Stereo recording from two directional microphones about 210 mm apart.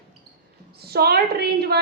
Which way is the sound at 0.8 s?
50° right (ahead or behind).